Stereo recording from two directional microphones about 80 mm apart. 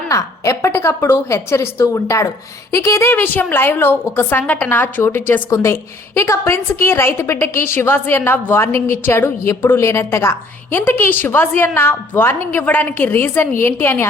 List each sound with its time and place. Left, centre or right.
0.1 s a woman's voice: left